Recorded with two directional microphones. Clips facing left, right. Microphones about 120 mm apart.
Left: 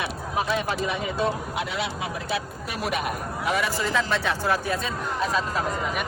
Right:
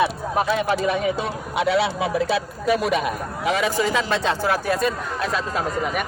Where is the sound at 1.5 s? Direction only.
90° right.